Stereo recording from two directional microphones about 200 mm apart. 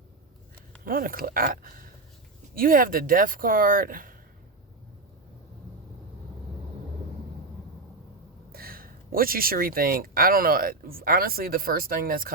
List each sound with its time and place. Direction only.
0.9 s speech: 45° right (ahead or behind)
8.5 s speech: 45° right (ahead or behind)